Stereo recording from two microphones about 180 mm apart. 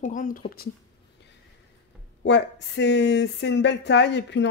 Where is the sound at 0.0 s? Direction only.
45° left (ahead or behind).